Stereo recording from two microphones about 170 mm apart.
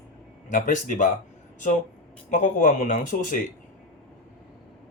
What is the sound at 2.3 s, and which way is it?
Speech, 50° left (ahead or behind).